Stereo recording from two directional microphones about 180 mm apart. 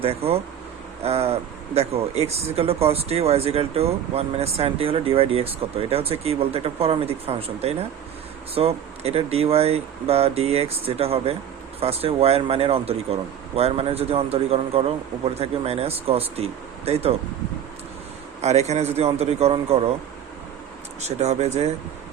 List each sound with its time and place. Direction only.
0.0 s speech: 35° right (ahead or behind)
18.4 s speech: 35° right (ahead or behind)
21.0 s speech: 40° right (ahead or behind)